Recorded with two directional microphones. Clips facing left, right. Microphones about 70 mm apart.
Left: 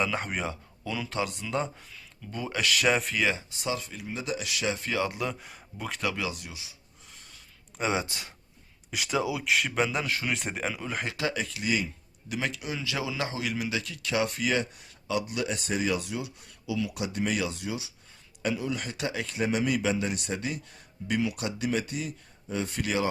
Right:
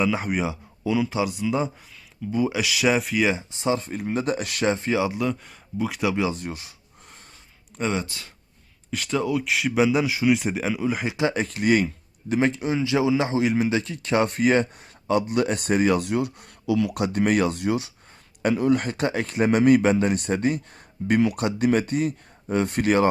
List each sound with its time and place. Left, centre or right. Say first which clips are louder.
0.0 s speech: right 6 dB; centre
3.2 s a man's voice: right 6 dB; right
4.7 s speech: right 8 dB; right
5.1 s speech: right 7 dB; centre
6.0 s speech: right 7 dB; centre
6.2 s a sound: right 8 dB; right
7.8 s speech: right 3 dB; centre
8.0 s speech: right 1 dB; left
8.9 s speech: right 5 dB; centre
11.3 s speech: right 10 dB; right
12.3 s a man's voice: right 10 dB; right